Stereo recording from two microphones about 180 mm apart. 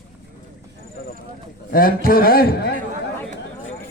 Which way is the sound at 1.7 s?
55° left (ahead or behind).